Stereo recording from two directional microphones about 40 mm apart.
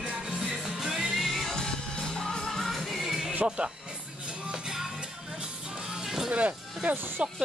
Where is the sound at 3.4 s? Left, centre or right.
Right.